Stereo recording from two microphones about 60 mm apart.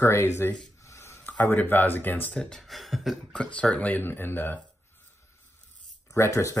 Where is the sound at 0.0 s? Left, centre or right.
Left.